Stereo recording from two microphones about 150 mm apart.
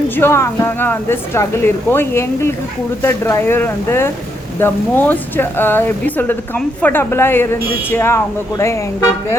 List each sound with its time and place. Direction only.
0.2 s speech: 20° left (ahead or behind)